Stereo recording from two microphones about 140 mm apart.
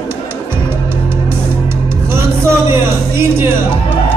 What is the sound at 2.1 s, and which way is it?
Music, 20° right (ahead or behind).